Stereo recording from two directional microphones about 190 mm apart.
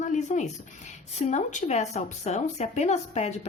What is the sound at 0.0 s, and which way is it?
Speech, 40° left (ahead or behind).